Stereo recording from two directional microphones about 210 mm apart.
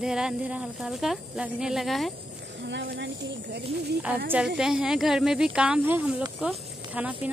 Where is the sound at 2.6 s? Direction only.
55° right (ahead or behind).